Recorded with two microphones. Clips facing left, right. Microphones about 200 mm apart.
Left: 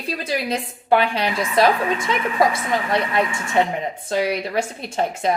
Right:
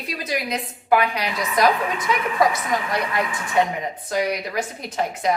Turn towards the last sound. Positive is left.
turn(degrees=25)  # may be behind; listen again after turning